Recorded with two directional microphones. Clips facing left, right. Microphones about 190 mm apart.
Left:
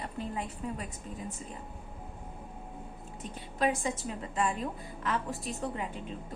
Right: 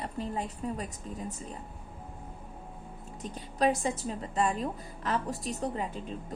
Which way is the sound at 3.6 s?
40° right (ahead or behind).